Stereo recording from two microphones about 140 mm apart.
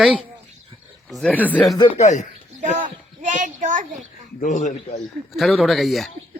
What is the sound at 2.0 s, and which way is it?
Speech, 60° left (ahead or behind).